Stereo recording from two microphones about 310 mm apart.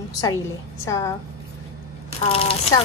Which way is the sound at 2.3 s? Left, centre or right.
Centre.